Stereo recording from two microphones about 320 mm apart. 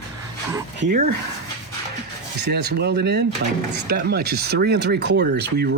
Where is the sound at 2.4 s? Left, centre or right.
Right.